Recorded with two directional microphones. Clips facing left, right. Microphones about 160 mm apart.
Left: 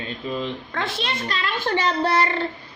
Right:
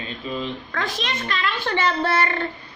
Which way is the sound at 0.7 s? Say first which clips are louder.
Even; 25° left (ahead or behind).